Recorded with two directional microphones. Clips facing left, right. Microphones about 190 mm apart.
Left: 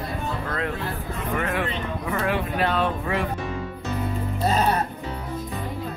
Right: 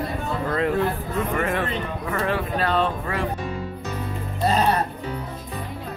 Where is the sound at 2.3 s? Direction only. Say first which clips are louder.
Right 2 dB; 20° left (ahead or behind).